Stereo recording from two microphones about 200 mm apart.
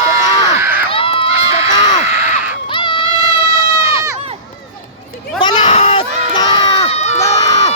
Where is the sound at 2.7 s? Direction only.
25° left (ahead or behind).